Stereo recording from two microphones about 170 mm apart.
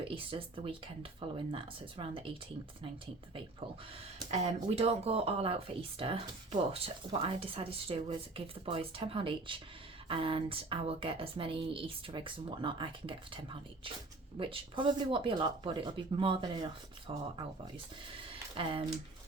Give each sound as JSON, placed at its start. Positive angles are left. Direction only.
{"t": 0.1, "sound": "speech", "side_deg": -30}
{"t": 4.3, "sound": "speech", "side_deg": -40}
{"t": 18.1, "sound": "typing", "side_deg": -30}